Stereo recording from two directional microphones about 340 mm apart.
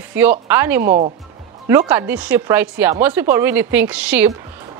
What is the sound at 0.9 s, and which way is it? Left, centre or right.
Speech, centre.